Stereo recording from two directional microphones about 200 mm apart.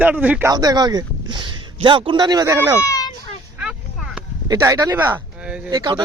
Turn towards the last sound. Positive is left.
turn(degrees=-20)  # may be behind; listen again after turning